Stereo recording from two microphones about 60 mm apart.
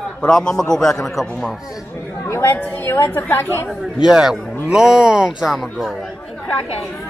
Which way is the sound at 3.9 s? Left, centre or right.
Centre.